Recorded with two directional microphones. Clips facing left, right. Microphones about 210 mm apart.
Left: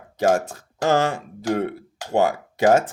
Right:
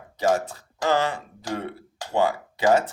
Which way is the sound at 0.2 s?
50° left (ahead or behind).